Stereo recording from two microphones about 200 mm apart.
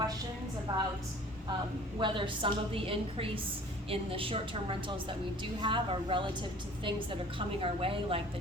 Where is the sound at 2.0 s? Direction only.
25° right (ahead or behind).